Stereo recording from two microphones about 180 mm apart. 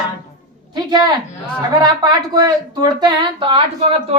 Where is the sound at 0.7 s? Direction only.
25° right (ahead or behind).